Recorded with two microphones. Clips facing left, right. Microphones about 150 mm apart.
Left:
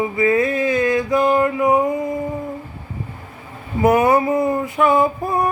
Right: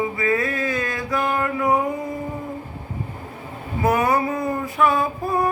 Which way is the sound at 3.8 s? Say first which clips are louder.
Left 5 dB; 20° left (ahead or behind).